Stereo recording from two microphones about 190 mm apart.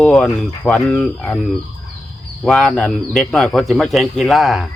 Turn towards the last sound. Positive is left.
turn(degrees=0)  # may be behind; listen again after turning